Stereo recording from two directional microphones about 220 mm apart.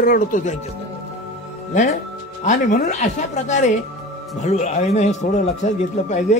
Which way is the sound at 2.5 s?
35° left (ahead or behind).